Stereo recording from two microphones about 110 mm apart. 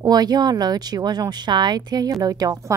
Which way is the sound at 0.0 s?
40° right (ahead or behind).